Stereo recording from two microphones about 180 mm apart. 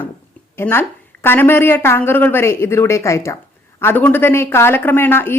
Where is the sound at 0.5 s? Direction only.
10° left (ahead or behind).